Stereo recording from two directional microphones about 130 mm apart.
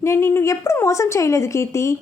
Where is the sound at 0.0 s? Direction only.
20° left (ahead or behind).